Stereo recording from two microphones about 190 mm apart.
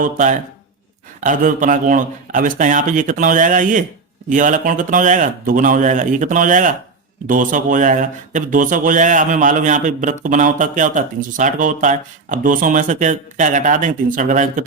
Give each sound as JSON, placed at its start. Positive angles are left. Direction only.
{"t": 0.0, "sound": "speech", "side_deg": -40}